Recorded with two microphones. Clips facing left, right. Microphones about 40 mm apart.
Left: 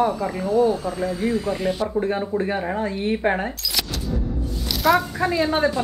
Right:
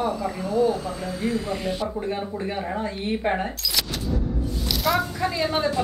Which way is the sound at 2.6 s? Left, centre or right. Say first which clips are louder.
Left 3 dB; centre.